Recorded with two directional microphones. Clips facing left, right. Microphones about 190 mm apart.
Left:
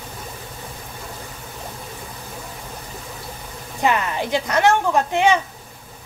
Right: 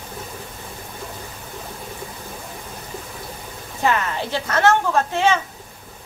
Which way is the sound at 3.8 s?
15° left (ahead or behind).